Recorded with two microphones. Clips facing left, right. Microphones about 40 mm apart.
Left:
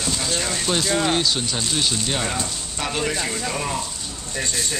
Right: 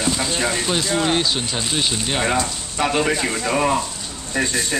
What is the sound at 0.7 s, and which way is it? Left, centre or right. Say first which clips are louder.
Speech: left 2 dB; centre.